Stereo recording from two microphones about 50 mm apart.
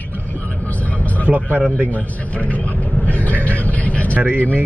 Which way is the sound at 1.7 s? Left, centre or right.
Left.